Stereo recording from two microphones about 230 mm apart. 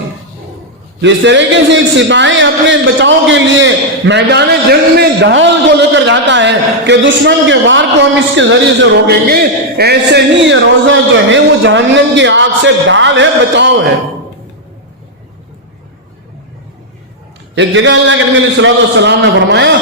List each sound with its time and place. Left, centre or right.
1.0 s a man's voice: right
17.5 s a man's voice: right